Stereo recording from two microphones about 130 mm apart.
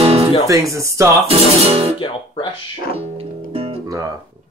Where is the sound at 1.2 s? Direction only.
50° right (ahead or behind).